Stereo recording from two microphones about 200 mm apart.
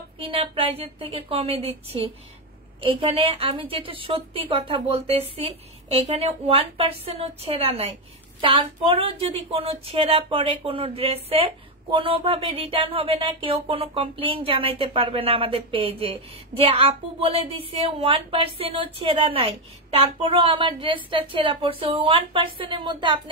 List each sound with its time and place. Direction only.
0.2 s a woman's voice: 25° right (ahead or behind)